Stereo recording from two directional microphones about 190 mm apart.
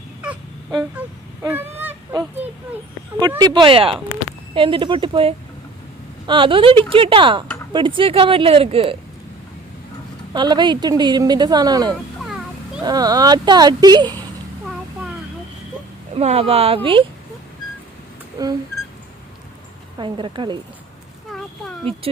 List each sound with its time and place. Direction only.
0.8 s honk: 5° right (ahead or behind)
3.2 s a woman's voice: 20° right (ahead or behind)
10.3 s a woman's voice: 25° right (ahead or behind)
12.2 s music: centre (ahead or behind)
12.8 s a woman's voice: 20° right (ahead or behind)
16.1 s speech: 30° right (ahead or behind)
18.4 s a woman's voice: 20° right (ahead or behind)
20.0 s a woman's voice: 25° right (ahead or behind)